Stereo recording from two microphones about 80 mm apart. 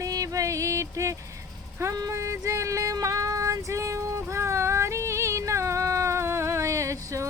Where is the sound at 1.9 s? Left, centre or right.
Right.